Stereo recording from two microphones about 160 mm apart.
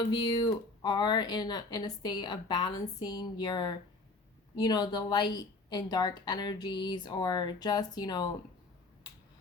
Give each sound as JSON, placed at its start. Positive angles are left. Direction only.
{"t": 0.1, "sound": "a woman's voice", "side_deg": 25}